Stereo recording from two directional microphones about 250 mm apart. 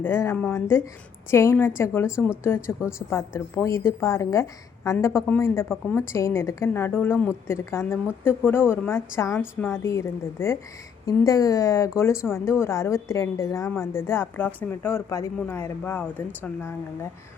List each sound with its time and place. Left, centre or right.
0.0 s a woman's voice: centre
2.0 s speech: centre
2.4 s a woman's voice: centre